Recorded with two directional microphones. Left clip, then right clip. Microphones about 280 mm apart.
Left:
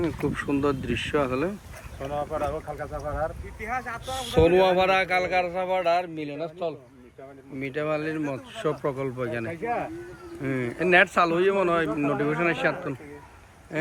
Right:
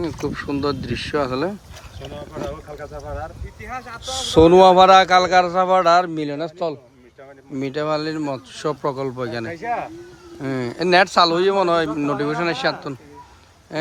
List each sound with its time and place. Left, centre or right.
0.0 s speech: centre
3.1 s speech: centre
3.7 s speech: centre
5.6 s speech: right
7.6 s speech: centre